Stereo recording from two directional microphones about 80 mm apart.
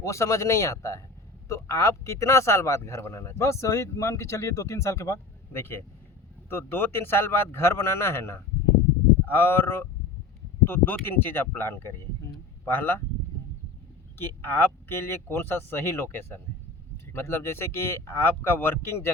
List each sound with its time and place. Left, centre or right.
0.0 s a man's voice: left
14.2 s speech: left